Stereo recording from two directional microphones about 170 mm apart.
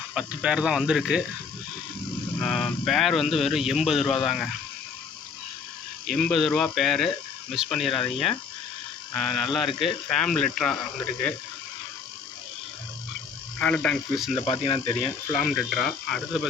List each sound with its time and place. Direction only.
0.1 s speech: 5° right (ahead or behind)
2.4 s speech: centre (ahead or behind)
6.1 s speech: 5° left (ahead or behind)
13.6 s speech: 5° left (ahead or behind)
14.3 s speech: 35° left (ahead or behind)
15.3 s speech: centre (ahead or behind)